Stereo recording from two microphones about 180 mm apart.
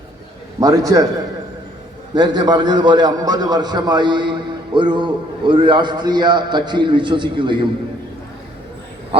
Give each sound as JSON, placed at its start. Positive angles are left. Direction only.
{"t": 0.6, "sound": "a man's voice", "side_deg": -20}
{"t": 2.1, "sound": "a man's voice", "side_deg": -25}